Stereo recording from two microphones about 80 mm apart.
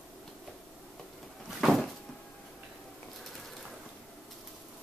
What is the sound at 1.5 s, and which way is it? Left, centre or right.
Cupboard open or close, centre.